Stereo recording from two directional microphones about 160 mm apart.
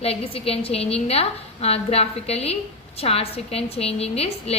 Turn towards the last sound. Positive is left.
turn(degrees=40)  # may be behind; listen again after turning